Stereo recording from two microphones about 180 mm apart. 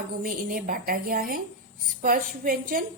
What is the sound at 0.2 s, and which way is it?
A woman's voice, 55° right (ahead or behind).